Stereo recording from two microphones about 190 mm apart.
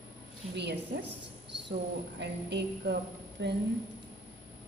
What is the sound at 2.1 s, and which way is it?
A woman's voice, 65° right (ahead or behind).